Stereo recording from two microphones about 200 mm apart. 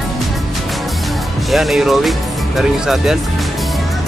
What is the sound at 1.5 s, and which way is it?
Speech, centre (ahead or behind).